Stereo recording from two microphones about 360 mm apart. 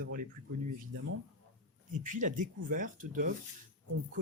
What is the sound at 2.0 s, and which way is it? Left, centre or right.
Speech, right.